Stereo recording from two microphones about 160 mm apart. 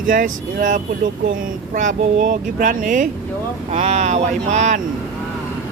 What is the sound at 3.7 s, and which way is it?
Speech, 45° right (ahead or behind).